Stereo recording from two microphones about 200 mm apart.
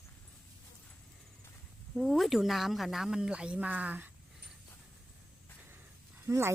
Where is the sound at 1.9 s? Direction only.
Centre (ahead or behind).